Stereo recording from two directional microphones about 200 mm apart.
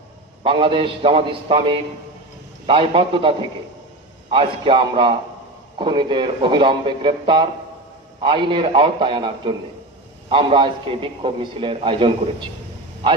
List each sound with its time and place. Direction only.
0.4 s a man's voice: 25° right (ahead or behind)